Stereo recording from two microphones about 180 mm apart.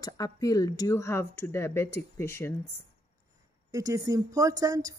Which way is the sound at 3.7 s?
20° right (ahead or behind).